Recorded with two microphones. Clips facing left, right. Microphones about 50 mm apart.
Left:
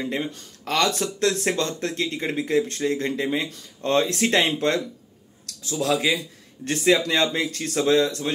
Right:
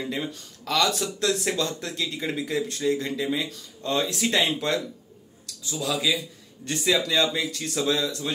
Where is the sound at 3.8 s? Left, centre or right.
Left.